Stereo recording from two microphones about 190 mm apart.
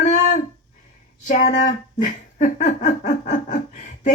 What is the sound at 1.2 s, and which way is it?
Speech, 45° left (ahead or behind).